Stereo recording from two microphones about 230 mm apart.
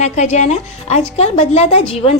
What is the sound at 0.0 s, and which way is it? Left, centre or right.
A woman's voice, left.